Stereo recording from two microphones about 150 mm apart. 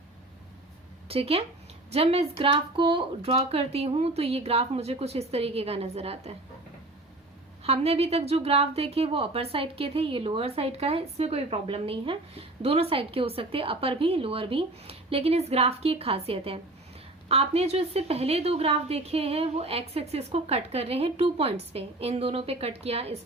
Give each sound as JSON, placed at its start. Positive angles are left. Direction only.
{"t": 1.0, "sound": "a woman's voice", "side_deg": -40}
{"t": 7.6, "sound": "a woman's voice", "side_deg": -45}